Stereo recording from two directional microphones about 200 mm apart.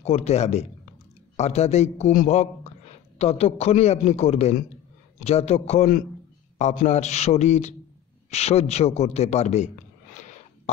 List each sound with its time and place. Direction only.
0.0 s a man's voice: 30° left (ahead or behind)